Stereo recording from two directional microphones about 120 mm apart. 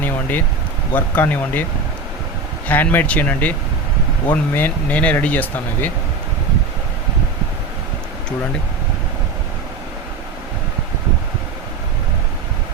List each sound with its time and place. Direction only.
0.0 s a sound: 15° left (ahead or behind)
0.9 s speech: 15° left (ahead or behind)
2.6 s speech: 15° left (ahead or behind)